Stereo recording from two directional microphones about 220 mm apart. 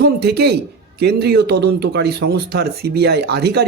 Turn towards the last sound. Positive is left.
turn(degrees=-50)  # may be behind; listen again after turning